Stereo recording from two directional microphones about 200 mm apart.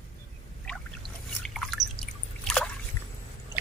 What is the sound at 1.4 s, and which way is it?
Drip, centre (ahead or behind).